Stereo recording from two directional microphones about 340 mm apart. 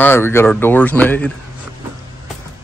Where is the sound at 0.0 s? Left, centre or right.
Centre.